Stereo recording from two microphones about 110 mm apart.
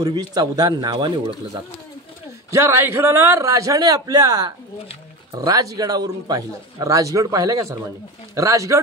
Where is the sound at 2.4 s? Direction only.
25° right (ahead or behind).